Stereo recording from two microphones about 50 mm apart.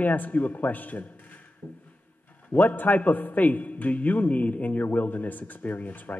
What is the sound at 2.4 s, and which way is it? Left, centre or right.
A man's voice, left.